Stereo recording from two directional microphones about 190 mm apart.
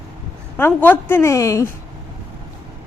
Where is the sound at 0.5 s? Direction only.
10° left (ahead or behind).